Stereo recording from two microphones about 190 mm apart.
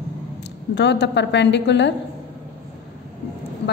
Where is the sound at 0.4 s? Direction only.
65° left (ahead or behind).